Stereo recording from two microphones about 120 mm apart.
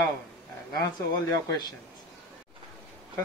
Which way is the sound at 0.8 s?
30° left (ahead or behind).